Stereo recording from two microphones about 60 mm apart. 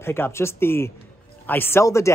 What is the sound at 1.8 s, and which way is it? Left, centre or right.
Speech, left.